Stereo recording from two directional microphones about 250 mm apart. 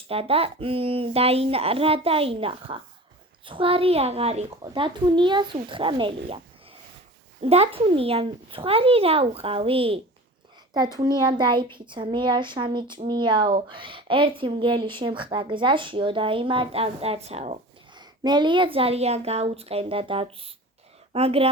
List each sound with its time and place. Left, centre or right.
0.1 s a child's voice: right
7.4 s a child's voice: right